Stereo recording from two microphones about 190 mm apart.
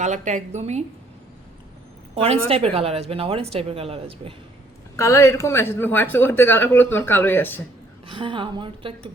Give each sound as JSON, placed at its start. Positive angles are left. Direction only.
{"t": 0.0, "sound": "speech", "side_deg": -40}
{"t": 2.1, "sound": "speech", "side_deg": -30}
{"t": 4.9, "sound": "speech", "side_deg": 15}
{"t": 8.0, "sound": "a woman's voice", "side_deg": -25}